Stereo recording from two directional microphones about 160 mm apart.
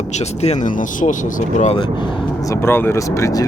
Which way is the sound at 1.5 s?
45° left (ahead or behind).